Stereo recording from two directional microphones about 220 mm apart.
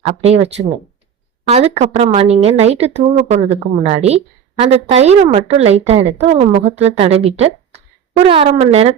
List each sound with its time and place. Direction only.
0.0 s a woman's voice: 25° right (ahead or behind)